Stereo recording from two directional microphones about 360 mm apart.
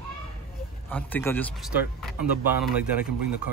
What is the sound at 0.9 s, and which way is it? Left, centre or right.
Speech, centre.